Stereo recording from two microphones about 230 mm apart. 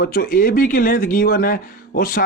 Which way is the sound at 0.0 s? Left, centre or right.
Left.